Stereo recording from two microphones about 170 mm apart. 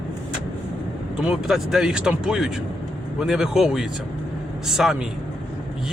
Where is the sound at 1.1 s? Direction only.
5° right (ahead or behind).